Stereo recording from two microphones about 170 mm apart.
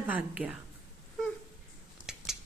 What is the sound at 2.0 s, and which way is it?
Scissors, 5° right (ahead or behind).